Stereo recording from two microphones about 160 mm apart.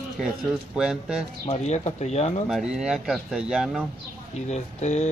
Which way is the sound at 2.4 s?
5° right (ahead or behind).